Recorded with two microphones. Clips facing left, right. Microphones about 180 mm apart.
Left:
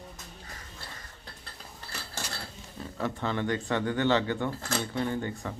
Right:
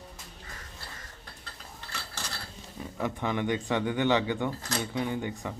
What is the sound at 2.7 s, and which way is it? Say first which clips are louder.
Speech: even; 15° right (ahead or behind).